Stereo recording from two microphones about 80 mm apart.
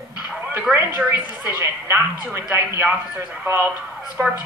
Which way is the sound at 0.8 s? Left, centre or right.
Right.